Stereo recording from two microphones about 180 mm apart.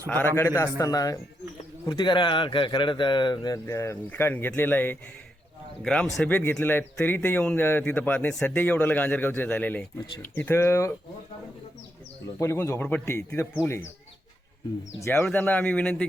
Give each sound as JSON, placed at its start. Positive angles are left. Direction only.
{"t": 0.3, "sound": "speech", "side_deg": 15}
{"t": 12.4, "sound": "speech", "side_deg": 15}
{"t": 14.9, "sound": "speech", "side_deg": 15}